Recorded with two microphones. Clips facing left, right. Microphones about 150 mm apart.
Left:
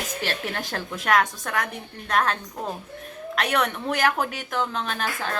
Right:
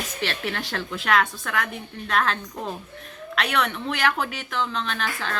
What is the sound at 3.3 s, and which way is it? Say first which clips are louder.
Speech: left 1 dB; 40° left (ahead or behind).